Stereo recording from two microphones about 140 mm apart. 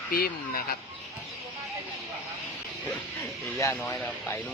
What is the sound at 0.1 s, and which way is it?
Speech, 90° left.